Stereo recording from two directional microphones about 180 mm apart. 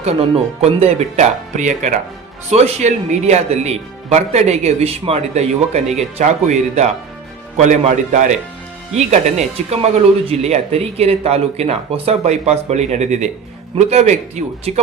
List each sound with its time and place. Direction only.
0.0 s speech: 35° right (ahead or behind)